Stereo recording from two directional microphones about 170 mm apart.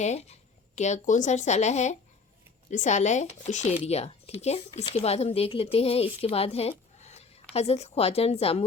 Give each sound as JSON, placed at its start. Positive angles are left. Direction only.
{"t": 0.0, "sound": "speech", "side_deg": 40}